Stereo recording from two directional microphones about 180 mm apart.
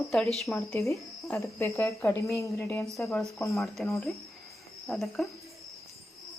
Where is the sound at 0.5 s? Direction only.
15° left (ahead or behind).